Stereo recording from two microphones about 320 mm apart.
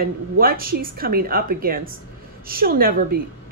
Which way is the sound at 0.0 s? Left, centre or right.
Right.